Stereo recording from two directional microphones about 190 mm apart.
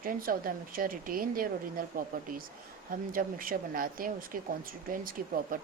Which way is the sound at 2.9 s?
45° right (ahead or behind).